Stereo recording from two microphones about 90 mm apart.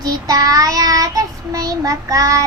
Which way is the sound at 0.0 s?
40° right (ahead or behind).